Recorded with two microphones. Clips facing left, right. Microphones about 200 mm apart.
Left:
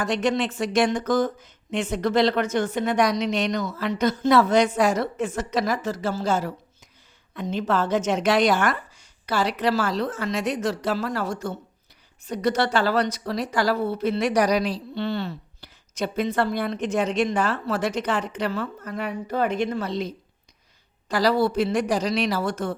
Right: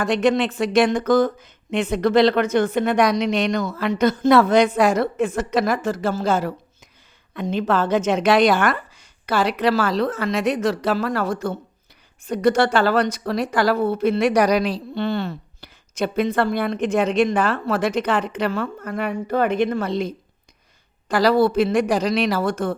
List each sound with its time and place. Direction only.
0.0 s a woman's voice: 55° right (ahead or behind)